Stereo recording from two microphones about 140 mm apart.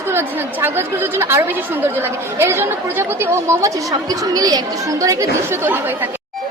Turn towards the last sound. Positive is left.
turn(degrees=-20)  # may be behind; listen again after turning